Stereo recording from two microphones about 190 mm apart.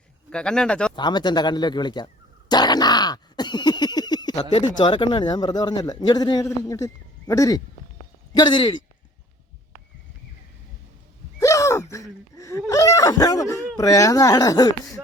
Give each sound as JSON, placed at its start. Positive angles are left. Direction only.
{"t": 0.3, "sound": "speech", "side_deg": 5}
{"t": 0.9, "sound": "groan", "side_deg": 25}
{"t": 8.3, "sound": "speech", "side_deg": 25}
{"t": 11.3, "sound": "gasp", "side_deg": 15}
{"t": 12.4, "sound": "speech", "side_deg": 15}